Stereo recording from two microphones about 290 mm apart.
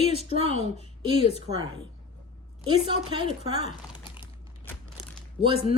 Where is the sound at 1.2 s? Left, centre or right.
Left.